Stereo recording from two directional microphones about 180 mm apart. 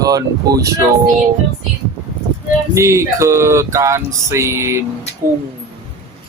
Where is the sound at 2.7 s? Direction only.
15° right (ahead or behind).